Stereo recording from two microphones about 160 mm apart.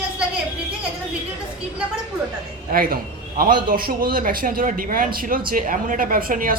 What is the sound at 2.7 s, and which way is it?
A man's voice, 65° right (ahead or behind).